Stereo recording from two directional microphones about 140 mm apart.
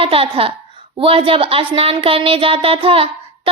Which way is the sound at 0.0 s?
40° right (ahead or behind).